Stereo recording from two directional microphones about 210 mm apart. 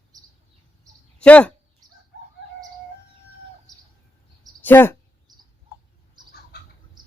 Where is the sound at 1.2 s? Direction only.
5° left (ahead or behind).